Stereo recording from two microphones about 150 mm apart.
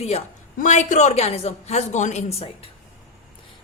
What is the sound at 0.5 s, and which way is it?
A woman's voice, 55° left (ahead or behind).